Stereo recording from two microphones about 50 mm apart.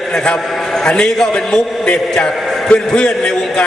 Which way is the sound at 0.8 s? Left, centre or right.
Centre.